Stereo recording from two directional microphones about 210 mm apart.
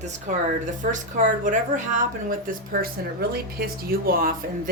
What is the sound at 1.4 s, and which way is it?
A woman's voice, 35° right (ahead or behind).